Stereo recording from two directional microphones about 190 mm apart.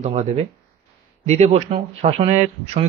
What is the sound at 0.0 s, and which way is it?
Speech, 35° right (ahead or behind).